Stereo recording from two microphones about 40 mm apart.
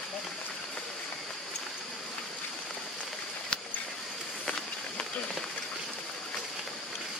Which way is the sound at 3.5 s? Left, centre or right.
Centre.